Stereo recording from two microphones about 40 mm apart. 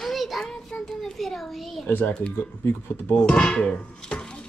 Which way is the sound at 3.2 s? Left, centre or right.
Left.